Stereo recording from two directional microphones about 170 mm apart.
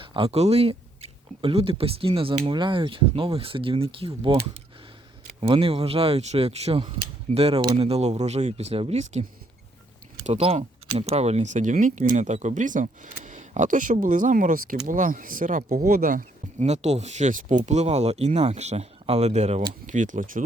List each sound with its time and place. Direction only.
0.0 s speech: 30° right (ahead or behind)
10.2 s speech: 40° right (ahead or behind)